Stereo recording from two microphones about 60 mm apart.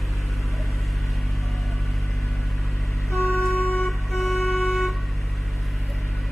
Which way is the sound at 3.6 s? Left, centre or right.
Left.